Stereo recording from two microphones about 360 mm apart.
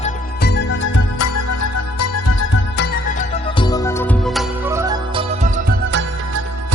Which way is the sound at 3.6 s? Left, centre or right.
Centre.